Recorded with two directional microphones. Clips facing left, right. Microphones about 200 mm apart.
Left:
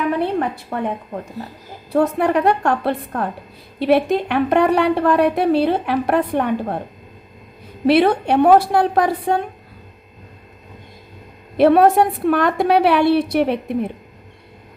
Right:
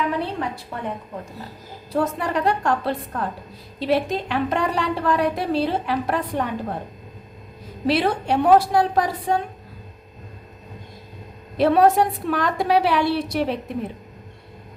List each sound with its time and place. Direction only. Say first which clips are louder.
0.2 s a sound: left 6 dB; 55° left (ahead or behind)
1.9 s a woman's voice: left 6 dB; 60° left (ahead or behind)
7.9 s a woman's voice: left 6 dB; 60° left (ahead or behind)
11.5 s a woman's voice: left 4 dB; 60° left (ahead or behind)